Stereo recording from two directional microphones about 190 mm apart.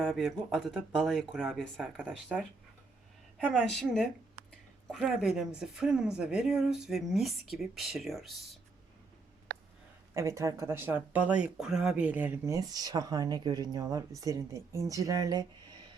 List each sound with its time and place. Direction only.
0.0 s speech: centre (ahead or behind)
10.2 s speech: 15° right (ahead or behind)